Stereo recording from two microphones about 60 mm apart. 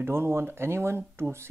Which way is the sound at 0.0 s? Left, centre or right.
Right.